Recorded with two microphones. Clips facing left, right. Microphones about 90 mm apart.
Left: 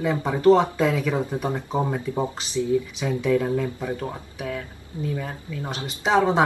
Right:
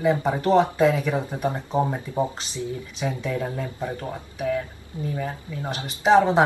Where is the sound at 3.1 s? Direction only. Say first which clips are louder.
Left 5 dB; 25° right (ahead or behind).